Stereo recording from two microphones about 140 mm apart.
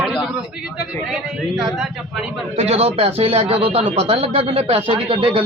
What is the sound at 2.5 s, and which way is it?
Speech, 50° right (ahead or behind).